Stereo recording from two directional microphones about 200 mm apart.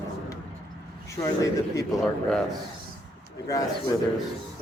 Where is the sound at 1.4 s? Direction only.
15° left (ahead or behind).